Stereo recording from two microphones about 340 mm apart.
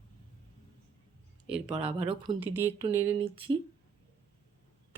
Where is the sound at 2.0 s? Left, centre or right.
Centre.